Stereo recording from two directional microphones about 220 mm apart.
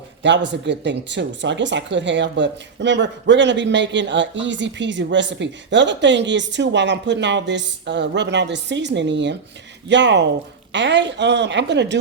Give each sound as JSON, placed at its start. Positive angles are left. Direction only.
{"t": 0.2, "sound": "speech", "side_deg": -55}